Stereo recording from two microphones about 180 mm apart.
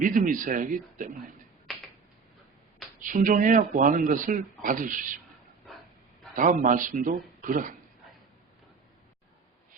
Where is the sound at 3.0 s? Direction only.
45° right (ahead or behind).